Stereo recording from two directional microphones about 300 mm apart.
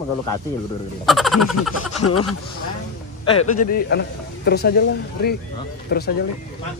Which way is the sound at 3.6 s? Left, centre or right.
Left.